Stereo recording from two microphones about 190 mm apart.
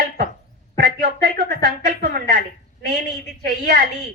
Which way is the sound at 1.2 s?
50° right (ahead or behind).